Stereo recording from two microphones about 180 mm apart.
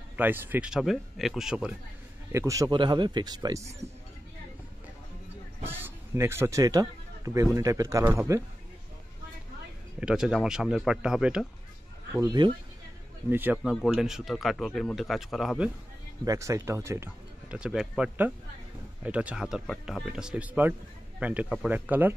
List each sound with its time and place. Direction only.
0.1 s speech: 10° right (ahead or behind)
2.3 s speech: 20° right (ahead or behind)
5.6 s speech: 10° right (ahead or behind)
9.9 s speech: 5° right (ahead or behind)
12.1 s speech: 20° right (ahead or behind)
13.3 s speech: 10° right (ahead or behind)
16.3 s speech: 15° right (ahead or behind)